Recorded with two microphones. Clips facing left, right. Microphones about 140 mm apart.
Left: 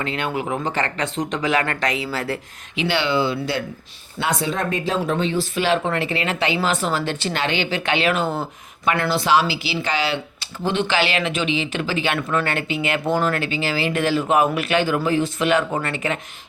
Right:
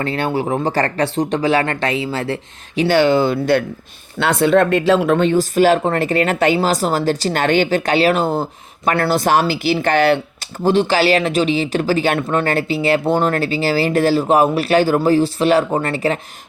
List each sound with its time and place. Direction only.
0.0 s speech: 35° right (ahead or behind)
2.7 s speech: 40° right (ahead or behind)
4.2 s speech: 65° right (ahead or behind); by 16.2 s 35° right (ahead or behind)